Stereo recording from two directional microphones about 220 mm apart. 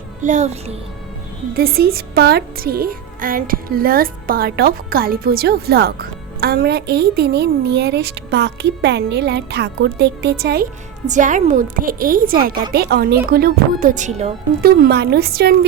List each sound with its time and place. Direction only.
0.2 s a woman's voice: 35° right (ahead or behind)
1.5 s a woman's voice: 45° right (ahead or behind)
11.0 s a woman's voice: 35° right (ahead or behind)
14.6 s a woman's voice: 45° right (ahead or behind)